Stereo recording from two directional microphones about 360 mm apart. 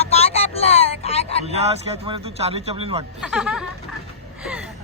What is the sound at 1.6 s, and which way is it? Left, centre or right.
A man's voice, centre.